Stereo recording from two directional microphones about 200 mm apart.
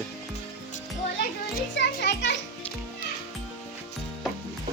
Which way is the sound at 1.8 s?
60° left (ahead or behind).